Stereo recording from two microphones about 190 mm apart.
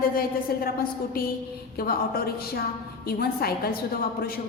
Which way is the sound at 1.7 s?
50° left (ahead or behind).